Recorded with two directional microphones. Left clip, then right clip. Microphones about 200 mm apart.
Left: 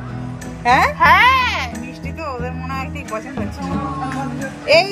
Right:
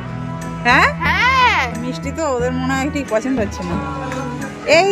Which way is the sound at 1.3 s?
15° right (ahead or behind).